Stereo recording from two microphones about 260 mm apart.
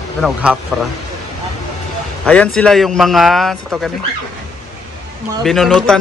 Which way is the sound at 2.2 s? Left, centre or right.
Centre.